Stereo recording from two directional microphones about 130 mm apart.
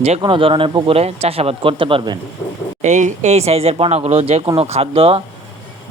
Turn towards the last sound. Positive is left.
turn(degrees=-50)  # may be behind; listen again after turning